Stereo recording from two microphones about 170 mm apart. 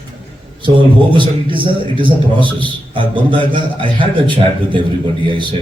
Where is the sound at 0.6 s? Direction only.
30° right (ahead or behind).